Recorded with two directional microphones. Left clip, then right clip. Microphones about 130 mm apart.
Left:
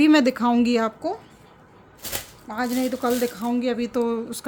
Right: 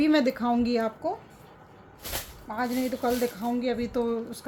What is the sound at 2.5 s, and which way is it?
Speech, 35° left (ahead or behind).